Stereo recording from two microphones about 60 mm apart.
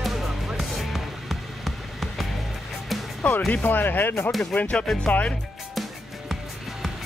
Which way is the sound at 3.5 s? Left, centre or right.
Left.